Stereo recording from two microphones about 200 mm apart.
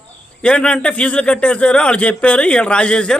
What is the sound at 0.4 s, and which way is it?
Speech, 5° left (ahead or behind).